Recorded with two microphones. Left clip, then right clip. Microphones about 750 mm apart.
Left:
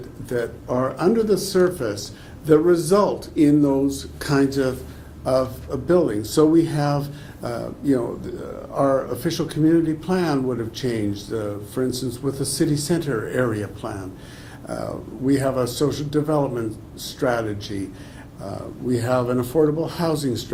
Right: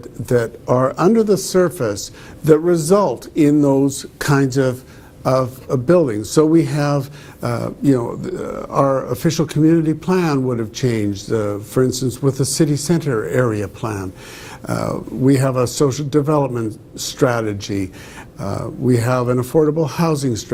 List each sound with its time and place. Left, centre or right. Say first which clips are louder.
0.3 s speech: right 8 dB; right